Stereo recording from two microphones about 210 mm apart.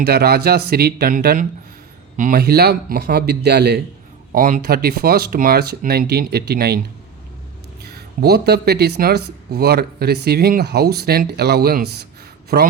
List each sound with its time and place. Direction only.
0.0 s speech: 50° right (ahead or behind)
4.3 s speech: 40° right (ahead or behind)
7.9 s speech: 50° right (ahead or behind)